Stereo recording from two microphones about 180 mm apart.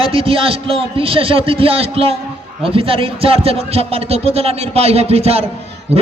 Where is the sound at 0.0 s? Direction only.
30° right (ahead or behind).